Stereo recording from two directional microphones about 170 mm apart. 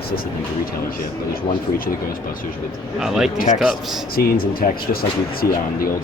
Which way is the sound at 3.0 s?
5° right (ahead or behind).